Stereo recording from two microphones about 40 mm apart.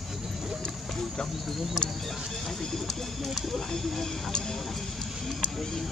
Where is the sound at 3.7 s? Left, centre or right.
Centre.